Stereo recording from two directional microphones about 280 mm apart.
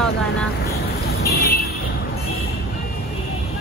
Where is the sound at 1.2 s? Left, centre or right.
Left.